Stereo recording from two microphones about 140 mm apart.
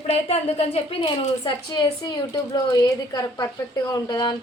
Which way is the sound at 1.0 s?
35° left (ahead or behind).